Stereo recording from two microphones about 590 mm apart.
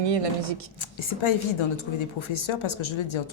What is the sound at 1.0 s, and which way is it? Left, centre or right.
A woman's voice, left.